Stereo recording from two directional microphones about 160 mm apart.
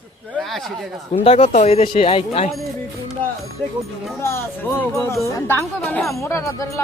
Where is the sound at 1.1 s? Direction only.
40° left (ahead or behind).